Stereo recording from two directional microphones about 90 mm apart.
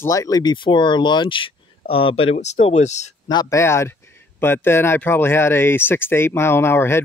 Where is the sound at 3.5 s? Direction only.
30° left (ahead or behind).